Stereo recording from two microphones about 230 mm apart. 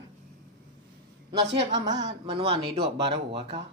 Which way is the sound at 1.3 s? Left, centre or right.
Right.